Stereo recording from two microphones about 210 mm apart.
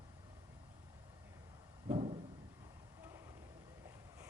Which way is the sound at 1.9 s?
25° right (ahead or behind).